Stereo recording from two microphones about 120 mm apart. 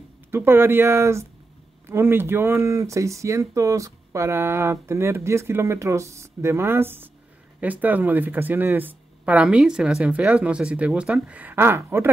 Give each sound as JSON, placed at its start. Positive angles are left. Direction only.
{"t": 0.3, "sound": "speech", "side_deg": -20}